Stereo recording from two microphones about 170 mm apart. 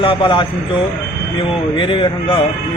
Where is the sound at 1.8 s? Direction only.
30° left (ahead or behind).